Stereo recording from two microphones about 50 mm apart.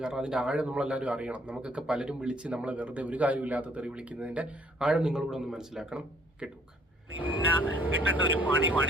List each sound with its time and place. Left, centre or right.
0.0 s speech: centre
4.8 s speech: centre
7.2 s speech: right